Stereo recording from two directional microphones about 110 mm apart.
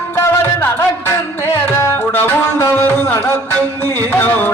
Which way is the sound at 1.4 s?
20° left (ahead or behind).